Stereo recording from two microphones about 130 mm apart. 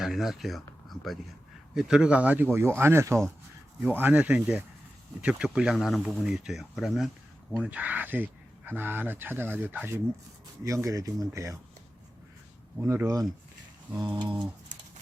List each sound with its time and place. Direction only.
0.0 s speech: centre (ahead or behind); by 11.5 s 25° right (ahead or behind)
12.8 s speech: 20° right (ahead or behind)
14.0 s pigeon: 35° right (ahead or behind)